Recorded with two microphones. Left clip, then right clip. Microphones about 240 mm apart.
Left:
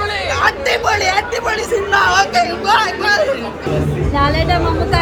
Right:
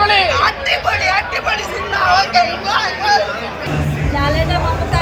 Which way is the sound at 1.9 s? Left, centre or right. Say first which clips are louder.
Even; left.